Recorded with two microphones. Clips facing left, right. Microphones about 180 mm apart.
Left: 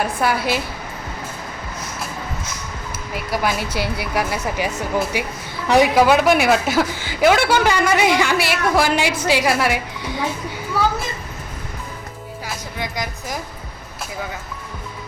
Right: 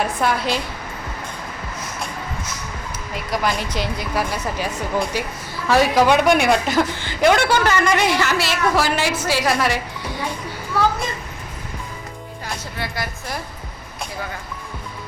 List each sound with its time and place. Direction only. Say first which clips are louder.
0.0 s a woman's voice: left 1 dB; 5° left (ahead or behind)
3.3 s a woman's voice: left 1 dB; 5° left (ahead or behind)
12.8 s a woman's voice: left 2 dB; 10° left (ahead or behind)